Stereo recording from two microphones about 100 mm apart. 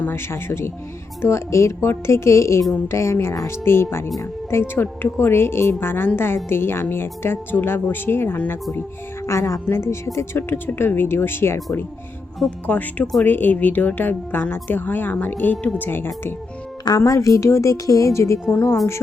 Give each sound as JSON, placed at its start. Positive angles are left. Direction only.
{"t": 0.0, "sound": "speech", "side_deg": 20}
{"t": 12.5, "sound": "a woman's voice", "side_deg": 15}